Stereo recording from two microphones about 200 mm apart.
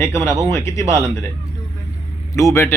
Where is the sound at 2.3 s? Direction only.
15° left (ahead or behind).